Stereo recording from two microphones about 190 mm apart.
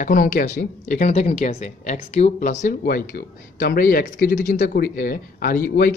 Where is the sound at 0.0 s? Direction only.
45° left (ahead or behind).